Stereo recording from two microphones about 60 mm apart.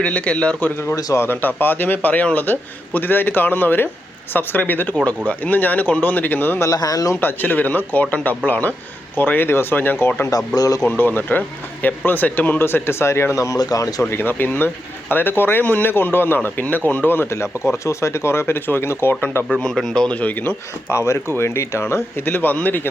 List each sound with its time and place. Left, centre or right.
0.0 s a man's voice: left
1.1 s a man's voice: left
6.6 s speech: left
7.2 s a man's voice: left
10.2 s speech: left
10.8 s a man's voice: left
12.5 s speech: left
14.1 s a man's voice: left
17.3 s speech: left
19.5 s a man's voice: centre
20.1 s a man's voice: left
20.9 s speech: left
22.3 s a man's voice: left